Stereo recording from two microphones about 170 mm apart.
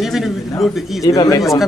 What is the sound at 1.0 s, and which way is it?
Speech, 20° left (ahead or behind).